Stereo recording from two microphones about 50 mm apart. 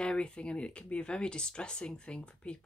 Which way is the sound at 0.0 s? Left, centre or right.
Centre.